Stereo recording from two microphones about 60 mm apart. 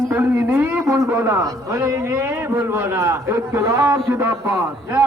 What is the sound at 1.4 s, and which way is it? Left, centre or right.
A man's voice, right.